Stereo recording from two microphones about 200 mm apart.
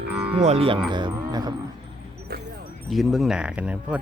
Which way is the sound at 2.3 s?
50° right (ahead or behind).